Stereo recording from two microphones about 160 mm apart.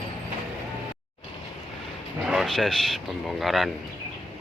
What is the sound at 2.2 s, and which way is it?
Speech, centre (ahead or behind).